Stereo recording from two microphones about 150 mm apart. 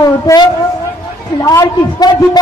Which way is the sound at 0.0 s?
25° left (ahead or behind).